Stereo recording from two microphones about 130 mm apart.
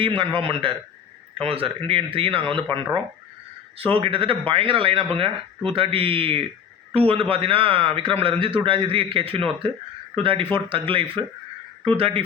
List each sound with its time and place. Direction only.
0.0 s a man's voice: 40° right (ahead or behind)